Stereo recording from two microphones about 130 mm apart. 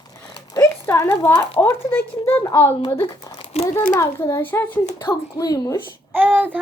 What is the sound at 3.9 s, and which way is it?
Speech, 20° left (ahead or behind).